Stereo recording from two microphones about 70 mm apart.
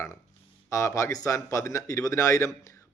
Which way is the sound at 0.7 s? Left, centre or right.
Left.